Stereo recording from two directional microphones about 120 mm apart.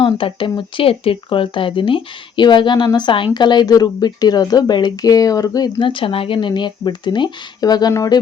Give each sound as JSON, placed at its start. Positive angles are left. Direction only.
{"t": 0.0, "sound": "speech", "side_deg": 45}